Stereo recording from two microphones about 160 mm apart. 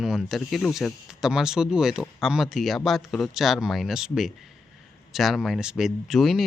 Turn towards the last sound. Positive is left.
turn(degrees=0)  # may be behind; listen again after turning